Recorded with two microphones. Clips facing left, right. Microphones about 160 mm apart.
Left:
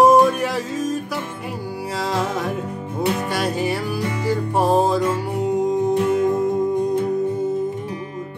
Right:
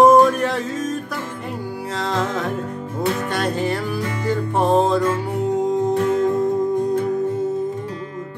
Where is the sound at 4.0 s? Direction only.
20° left (ahead or behind).